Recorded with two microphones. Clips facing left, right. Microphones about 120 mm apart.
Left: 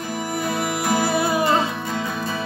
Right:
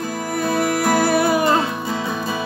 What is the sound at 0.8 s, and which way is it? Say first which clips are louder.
Music: right 3 dB; 60° right (ahead or behind).